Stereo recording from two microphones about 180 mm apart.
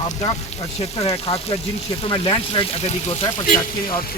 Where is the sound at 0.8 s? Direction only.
35° left (ahead or behind).